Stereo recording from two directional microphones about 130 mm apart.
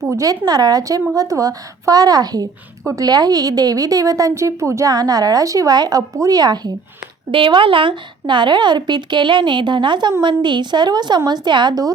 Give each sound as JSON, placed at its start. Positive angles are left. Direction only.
{"t": 0.0, "sound": "a woman's voice", "side_deg": -25}